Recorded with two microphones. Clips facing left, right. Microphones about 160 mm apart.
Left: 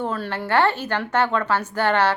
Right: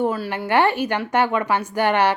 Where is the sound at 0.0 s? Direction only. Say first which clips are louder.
Right 4 dB; 10° right (ahead or behind).